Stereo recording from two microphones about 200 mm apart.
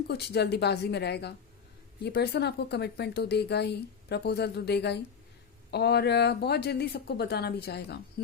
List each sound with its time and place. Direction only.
0.1 s speech: 55° left (ahead or behind)